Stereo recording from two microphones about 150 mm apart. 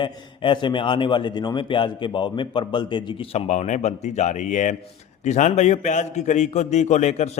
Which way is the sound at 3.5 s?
55° left (ahead or behind).